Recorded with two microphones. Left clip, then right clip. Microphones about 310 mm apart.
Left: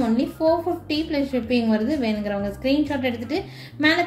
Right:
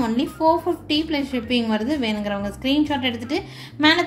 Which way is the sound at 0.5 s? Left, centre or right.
Right.